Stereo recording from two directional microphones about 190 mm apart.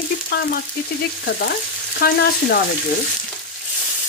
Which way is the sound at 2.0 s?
55° left (ahead or behind).